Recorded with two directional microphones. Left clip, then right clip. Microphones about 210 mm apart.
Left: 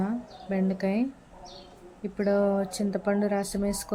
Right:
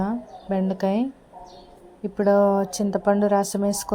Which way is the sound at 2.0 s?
15° right (ahead or behind).